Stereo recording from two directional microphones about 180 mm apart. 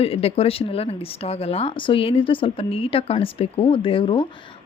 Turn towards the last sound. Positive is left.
turn(degrees=30)  # may be behind; listen again after turning